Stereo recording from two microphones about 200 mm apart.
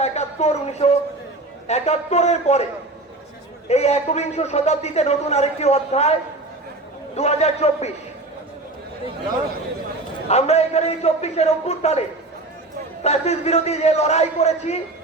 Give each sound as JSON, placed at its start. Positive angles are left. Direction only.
{"t": 0.0, "sound": "a sound", "side_deg": 35}
{"t": 1.6, "sound": "a man's voice", "side_deg": 35}
{"t": 3.7, "sound": "a man's voice", "side_deg": 35}
{"t": 7.2, "sound": "a man's voice", "side_deg": 30}
{"t": 10.2, "sound": "a man's voice", "side_deg": 30}